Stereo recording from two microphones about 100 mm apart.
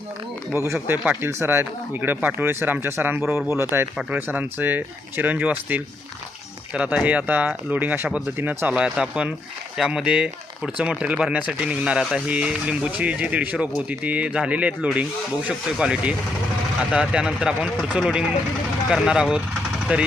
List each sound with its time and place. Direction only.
0.5 s speech: 25° right (ahead or behind)